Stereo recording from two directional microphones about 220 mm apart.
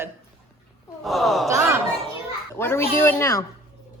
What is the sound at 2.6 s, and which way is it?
Speech, 10° left (ahead or behind).